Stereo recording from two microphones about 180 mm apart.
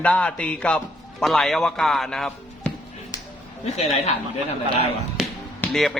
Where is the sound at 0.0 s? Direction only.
5° left (ahead or behind).